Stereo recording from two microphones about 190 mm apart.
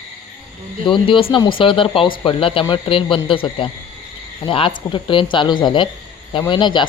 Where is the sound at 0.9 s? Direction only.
25° left (ahead or behind).